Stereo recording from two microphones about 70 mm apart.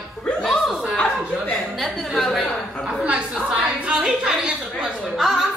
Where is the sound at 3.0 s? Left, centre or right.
Centre.